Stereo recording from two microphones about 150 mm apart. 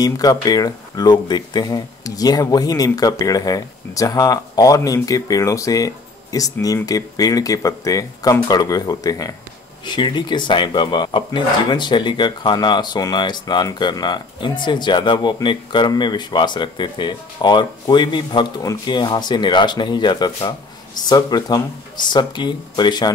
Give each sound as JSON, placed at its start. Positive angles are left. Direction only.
{"t": 0.0, "sound": "speech", "side_deg": 25}